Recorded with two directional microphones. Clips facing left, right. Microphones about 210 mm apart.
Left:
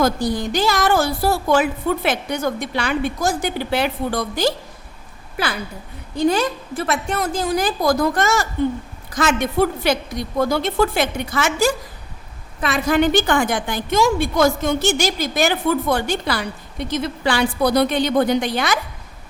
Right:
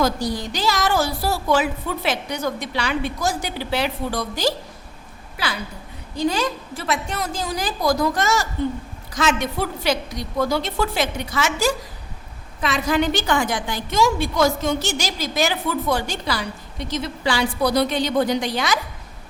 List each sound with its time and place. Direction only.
0.0 s a woman's voice: 50° left (ahead or behind)
6.1 s a woman's voice: 55° left (ahead or behind)